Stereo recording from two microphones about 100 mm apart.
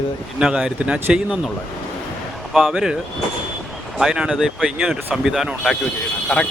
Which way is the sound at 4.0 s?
5° right (ahead or behind).